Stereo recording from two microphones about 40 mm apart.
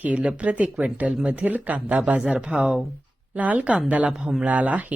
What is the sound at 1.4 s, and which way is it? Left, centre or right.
Speech, right.